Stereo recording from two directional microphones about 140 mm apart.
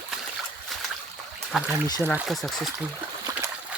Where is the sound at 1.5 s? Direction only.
5° right (ahead or behind).